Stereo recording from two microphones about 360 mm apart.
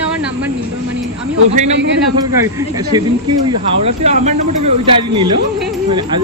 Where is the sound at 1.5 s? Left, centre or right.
Centre.